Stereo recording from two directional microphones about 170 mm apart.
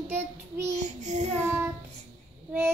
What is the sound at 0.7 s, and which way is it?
Child singing, 45° right (ahead or behind).